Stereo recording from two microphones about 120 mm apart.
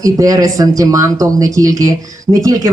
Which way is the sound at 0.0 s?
30° right (ahead or behind).